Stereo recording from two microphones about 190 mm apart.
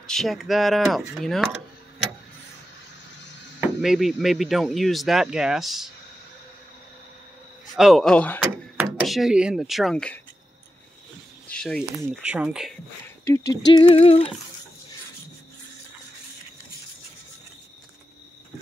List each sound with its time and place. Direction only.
0.0 s speech: centre (ahead or behind)
3.8 s speech: centre (ahead or behind)
7.7 s speech: centre (ahead or behind)
8.4 s a sound: 10° right (ahead or behind)
9.0 s speech: centre (ahead or behind)
11.4 s a sound: 5° left (ahead or behind)
12.1 s speech: 5° right (ahead or behind)
13.2 s speech: 15° left (ahead or behind)
13.9 s a sound: 30° left (ahead or behind)